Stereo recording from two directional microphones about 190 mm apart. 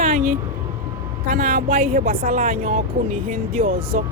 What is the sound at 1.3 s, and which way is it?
Speech, 45° right (ahead or behind).